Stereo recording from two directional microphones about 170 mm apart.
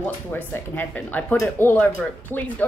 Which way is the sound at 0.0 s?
10° left (ahead or behind).